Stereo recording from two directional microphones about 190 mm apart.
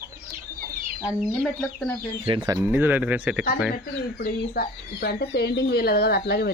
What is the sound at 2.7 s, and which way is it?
Speech, 10° right (ahead or behind).